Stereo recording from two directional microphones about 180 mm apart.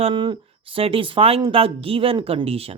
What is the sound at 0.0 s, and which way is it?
Speech, 25° right (ahead or behind).